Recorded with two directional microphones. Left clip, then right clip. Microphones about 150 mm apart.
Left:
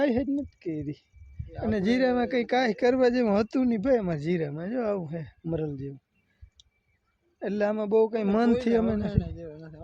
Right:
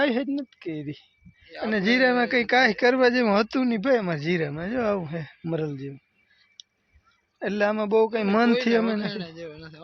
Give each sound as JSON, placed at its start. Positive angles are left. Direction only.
{"t": 0.0, "sound": "speech", "side_deg": 10}
{"t": 7.3, "sound": "speech", "side_deg": -10}
{"t": 9.0, "sound": "a man's voice", "side_deg": 70}
{"t": 9.4, "sound": "speech", "side_deg": 60}